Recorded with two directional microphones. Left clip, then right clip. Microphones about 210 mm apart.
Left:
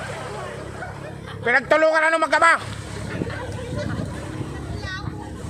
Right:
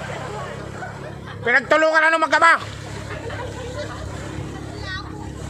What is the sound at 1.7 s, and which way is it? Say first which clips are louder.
Speech: right 1 dB; centre (ahead or behind).